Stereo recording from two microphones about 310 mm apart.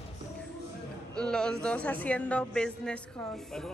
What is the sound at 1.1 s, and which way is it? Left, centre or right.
Speech, centre.